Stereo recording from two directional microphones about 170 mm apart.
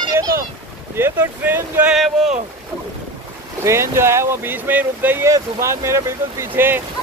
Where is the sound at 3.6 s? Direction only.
15° right (ahead or behind).